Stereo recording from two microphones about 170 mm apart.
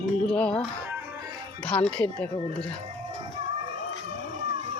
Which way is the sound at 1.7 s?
5° left (ahead or behind).